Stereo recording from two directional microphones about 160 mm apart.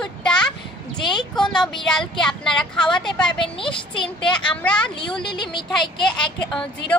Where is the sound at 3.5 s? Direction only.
30° left (ahead or behind).